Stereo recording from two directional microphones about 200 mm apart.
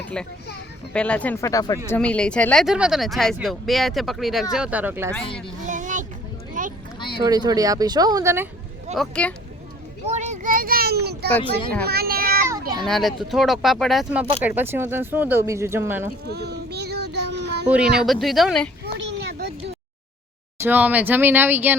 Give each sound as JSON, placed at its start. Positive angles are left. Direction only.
{"t": 0.0, "sound": "speech", "side_deg": 5}
{"t": 1.9, "sound": "speech", "side_deg": 5}
{"t": 5.6, "sound": "vehicle", "side_deg": -40}
{"t": 6.5, "sound": "boat", "side_deg": -40}
{"t": 7.2, "sound": "speech", "side_deg": -20}
{"t": 9.0, "sound": "speech", "side_deg": 5}
{"t": 10.1, "sound": "a child's voice", "side_deg": -35}
{"t": 12.5, "sound": "children playing", "side_deg": -20}
{"t": 12.8, "sound": "speech", "side_deg": 0}
{"t": 16.3, "sound": "child singing", "side_deg": -55}
{"t": 18.0, "sound": "speech", "side_deg": 0}
{"t": 18.9, "sound": "a sound", "side_deg": -55}
{"t": 20.6, "sound": "speech", "side_deg": -10}